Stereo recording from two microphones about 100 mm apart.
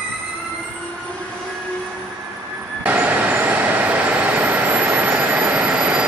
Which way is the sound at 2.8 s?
15° right (ahead or behind).